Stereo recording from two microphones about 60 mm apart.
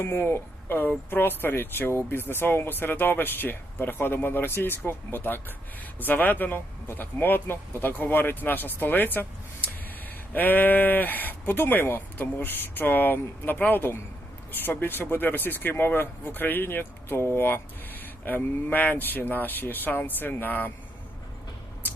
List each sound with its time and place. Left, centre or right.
0.0 s speech: left
10.3 s speech: left